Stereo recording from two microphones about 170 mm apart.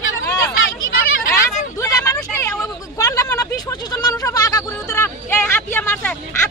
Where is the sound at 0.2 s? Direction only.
20° left (ahead or behind).